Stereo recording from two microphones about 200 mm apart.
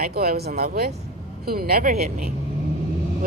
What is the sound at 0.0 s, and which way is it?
Speech, 50° right (ahead or behind).